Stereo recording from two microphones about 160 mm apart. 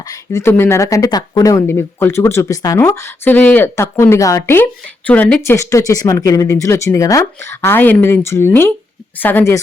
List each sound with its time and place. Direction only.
0.1 s speech: 20° left (ahead or behind)